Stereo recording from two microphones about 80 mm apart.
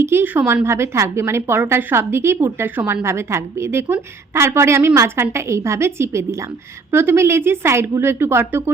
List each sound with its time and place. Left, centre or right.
0.0 s a woman's voice: right